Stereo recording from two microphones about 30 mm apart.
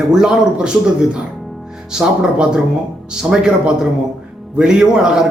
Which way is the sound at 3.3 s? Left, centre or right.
Right.